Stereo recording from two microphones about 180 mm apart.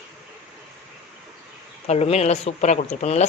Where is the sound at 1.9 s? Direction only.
35° left (ahead or behind).